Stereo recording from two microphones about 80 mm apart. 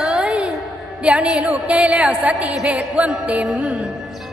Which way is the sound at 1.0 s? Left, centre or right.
Centre.